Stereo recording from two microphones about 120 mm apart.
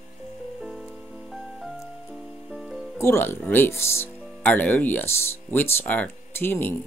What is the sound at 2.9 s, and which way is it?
Speech, 20° left (ahead or behind).